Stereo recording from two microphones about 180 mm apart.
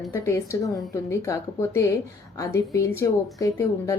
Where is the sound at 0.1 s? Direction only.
15° left (ahead or behind).